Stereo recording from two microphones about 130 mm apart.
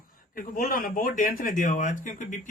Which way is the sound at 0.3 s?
90° left.